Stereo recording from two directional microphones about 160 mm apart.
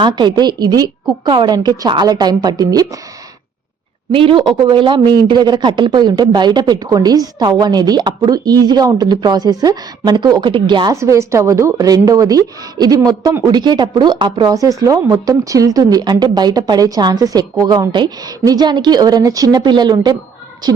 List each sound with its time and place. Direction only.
0.0 s speech: 30° right (ahead or behind)
4.1 s speech: 35° right (ahead or behind)
11.0 s speech: 20° right (ahead or behind)
13.5 s speech: 25° right (ahead or behind)